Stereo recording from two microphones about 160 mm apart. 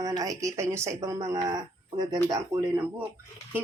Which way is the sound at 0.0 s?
20° right (ahead or behind).